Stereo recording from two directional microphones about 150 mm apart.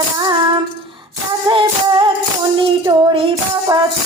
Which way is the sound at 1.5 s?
30° right (ahead or behind).